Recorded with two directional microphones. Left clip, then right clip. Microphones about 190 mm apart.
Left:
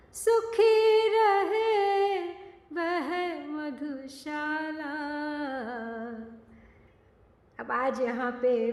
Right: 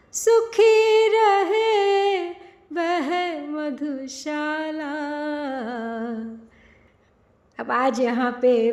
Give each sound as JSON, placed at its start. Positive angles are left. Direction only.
{"t": 0.2, "sound": "singing", "side_deg": -25}
{"t": 2.7, "sound": "music", "side_deg": -25}
{"t": 7.5, "sound": "a woman's voice", "side_deg": -40}